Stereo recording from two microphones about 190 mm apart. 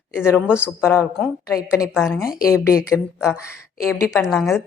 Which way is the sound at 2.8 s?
15° left (ahead or behind).